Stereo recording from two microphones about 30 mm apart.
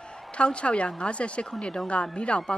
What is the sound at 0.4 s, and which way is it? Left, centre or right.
A woman's voice, left.